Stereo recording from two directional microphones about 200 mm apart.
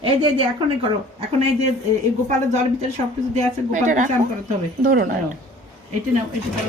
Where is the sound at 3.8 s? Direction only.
40° right (ahead or behind).